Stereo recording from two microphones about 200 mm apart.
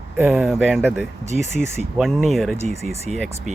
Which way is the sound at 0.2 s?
Centre (ahead or behind).